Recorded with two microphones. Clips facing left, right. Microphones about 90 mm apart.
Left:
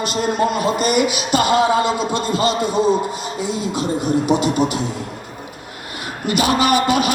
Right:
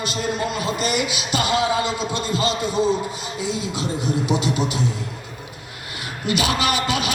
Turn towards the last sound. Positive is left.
turn(degrees=45)  # may be behind; listen again after turning